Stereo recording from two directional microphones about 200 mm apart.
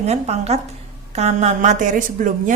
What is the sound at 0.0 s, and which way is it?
A woman's voice, 30° right (ahead or behind).